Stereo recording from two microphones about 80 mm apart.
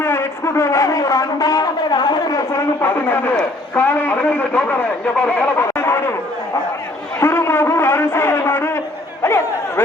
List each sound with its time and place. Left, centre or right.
0.0 s a man's voice: left
2.5 s a man's voice: left
2.9 s a man's voice: left
5.6 s speech: left
7.2 s a man's voice: left